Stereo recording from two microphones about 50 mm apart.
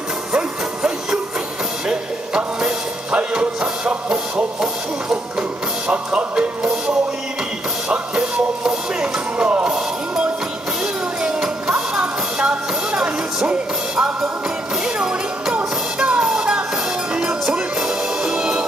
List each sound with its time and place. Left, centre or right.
0.3 s music: centre
5.9 s music: right
7.9 s music: centre
9.7 s music: centre
11.2 s music: centre